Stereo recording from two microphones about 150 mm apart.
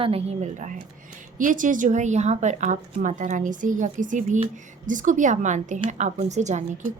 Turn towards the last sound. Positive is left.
turn(degrees=-50)  # may be behind; listen again after turning